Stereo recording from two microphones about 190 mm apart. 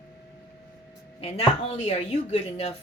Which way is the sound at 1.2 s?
35° left (ahead or behind).